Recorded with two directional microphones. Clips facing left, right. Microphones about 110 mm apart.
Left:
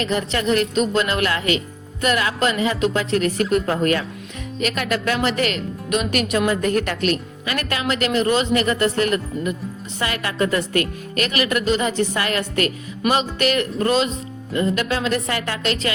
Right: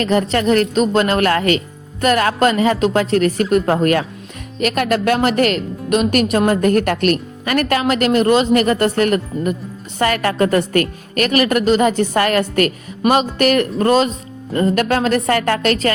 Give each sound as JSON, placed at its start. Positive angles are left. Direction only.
{"t": 0.0, "sound": "speech", "side_deg": -45}